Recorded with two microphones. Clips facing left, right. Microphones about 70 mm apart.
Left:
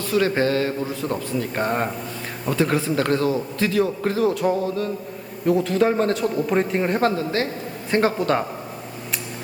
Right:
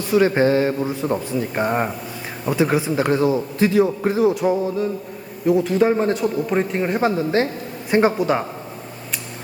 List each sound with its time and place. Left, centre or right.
0.0 s a man's voice: centre
7.2 s a man's voice: right